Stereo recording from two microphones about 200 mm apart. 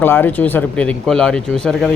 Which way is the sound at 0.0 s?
10° left (ahead or behind).